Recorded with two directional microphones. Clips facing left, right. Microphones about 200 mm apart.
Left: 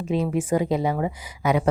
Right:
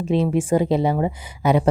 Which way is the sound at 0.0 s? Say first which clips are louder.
Right 4 dB; 30° right (ahead or behind).